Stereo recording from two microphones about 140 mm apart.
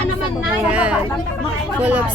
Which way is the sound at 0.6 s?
10° right (ahead or behind).